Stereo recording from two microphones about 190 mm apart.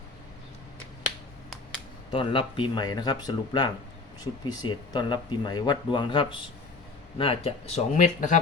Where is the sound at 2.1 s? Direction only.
25° left (ahead or behind).